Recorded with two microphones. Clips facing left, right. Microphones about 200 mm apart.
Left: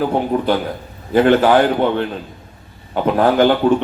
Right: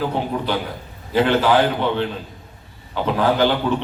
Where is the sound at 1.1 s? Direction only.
50° left (ahead or behind).